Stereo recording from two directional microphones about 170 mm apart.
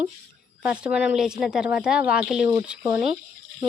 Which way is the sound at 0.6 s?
5° right (ahead or behind).